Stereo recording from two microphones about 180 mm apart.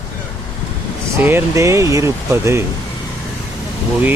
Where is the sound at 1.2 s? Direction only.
15° right (ahead or behind).